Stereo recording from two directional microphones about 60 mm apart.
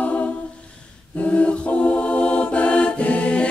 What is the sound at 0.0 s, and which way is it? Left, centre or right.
A capella, left.